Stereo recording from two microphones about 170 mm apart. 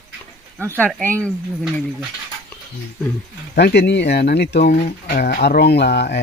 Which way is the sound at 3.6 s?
75° left (ahead or behind).